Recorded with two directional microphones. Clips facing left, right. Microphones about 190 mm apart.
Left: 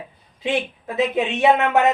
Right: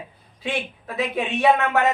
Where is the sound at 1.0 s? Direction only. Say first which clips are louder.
Left 4 dB; 20° left (ahead or behind).